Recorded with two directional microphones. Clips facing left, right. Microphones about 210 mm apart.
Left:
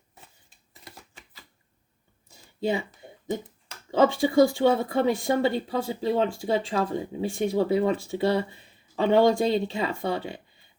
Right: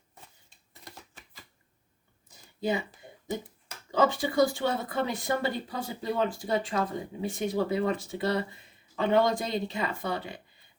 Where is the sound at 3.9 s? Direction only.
25° left (ahead or behind).